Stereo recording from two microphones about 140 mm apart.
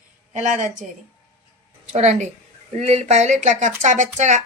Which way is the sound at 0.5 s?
65° right (ahead or behind).